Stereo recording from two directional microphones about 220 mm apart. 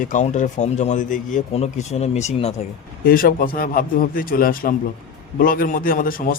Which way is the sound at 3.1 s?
40° left (ahead or behind).